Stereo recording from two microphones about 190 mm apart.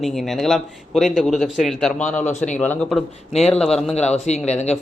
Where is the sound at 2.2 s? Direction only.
35° left (ahead or behind).